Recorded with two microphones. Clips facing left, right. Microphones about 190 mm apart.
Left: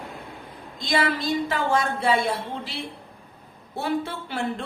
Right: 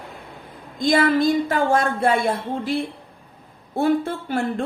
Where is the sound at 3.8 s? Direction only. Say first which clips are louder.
Right 7 dB; 50° right (ahead or behind).